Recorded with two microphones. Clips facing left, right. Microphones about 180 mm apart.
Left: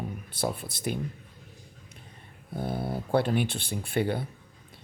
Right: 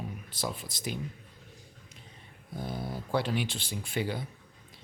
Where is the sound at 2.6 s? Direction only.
60° left (ahead or behind).